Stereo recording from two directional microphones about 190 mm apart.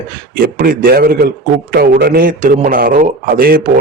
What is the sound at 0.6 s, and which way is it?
A man's voice, 50° right (ahead or behind).